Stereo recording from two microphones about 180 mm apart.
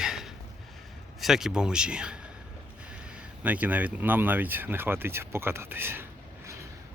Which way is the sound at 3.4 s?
10° right (ahead or behind).